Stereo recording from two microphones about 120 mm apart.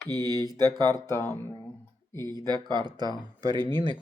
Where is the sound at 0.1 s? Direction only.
35° right (ahead or behind).